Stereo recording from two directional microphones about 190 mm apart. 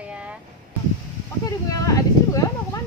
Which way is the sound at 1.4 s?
15° left (ahead or behind).